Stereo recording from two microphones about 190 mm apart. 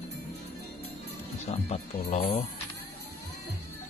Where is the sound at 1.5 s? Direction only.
30° left (ahead or behind).